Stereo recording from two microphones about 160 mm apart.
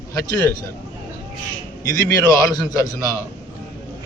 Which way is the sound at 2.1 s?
20° left (ahead or behind).